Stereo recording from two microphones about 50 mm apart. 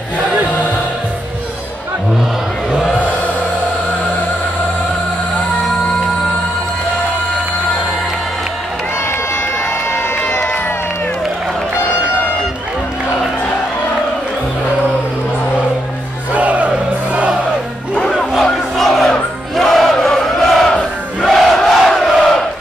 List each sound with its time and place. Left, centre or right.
16.3 s music: right
18.4 s battle cry: centre
19.5 s crowd: centre